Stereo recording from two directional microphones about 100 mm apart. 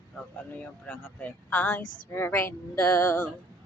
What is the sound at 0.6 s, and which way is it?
Speech, 15° left (ahead or behind).